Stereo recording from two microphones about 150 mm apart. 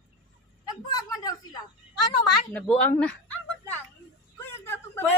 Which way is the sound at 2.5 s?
10° left (ahead or behind).